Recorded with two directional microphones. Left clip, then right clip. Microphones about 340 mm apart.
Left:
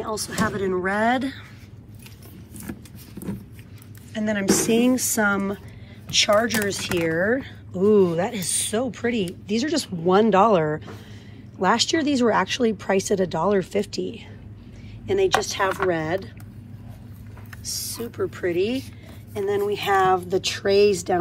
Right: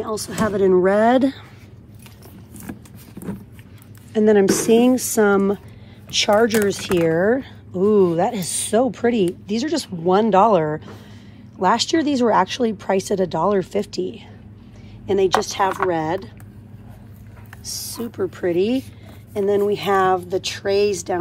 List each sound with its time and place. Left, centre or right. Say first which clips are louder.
0.0 s speech: right 3 dB; centre
2.7 s vehicle: right 1 dB; centre
4.1 s a woman's voice: right 8 dB; centre
17.6 s speech: right 1 dB; centre